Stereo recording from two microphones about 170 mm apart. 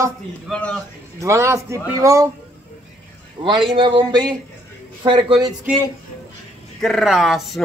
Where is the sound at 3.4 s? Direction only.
30° right (ahead or behind).